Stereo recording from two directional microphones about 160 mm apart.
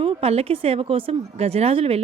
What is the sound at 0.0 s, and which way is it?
Speech, 40° right (ahead or behind).